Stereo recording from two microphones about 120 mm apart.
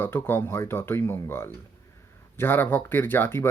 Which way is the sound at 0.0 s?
20° left (ahead or behind).